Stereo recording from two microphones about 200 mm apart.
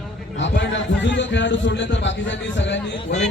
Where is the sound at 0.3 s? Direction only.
65° left (ahead or behind).